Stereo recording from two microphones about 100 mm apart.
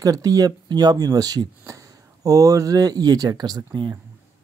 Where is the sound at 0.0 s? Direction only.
35° right (ahead or behind).